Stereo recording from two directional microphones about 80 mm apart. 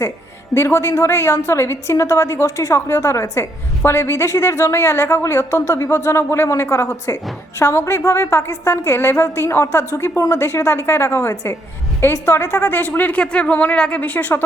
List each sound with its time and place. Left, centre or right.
0.5 s a woman's voice: left